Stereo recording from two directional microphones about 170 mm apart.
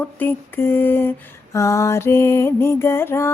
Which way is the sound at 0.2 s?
10° left (ahead or behind).